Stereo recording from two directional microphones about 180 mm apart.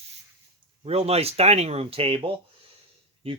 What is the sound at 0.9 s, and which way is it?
Speech, 35° right (ahead or behind).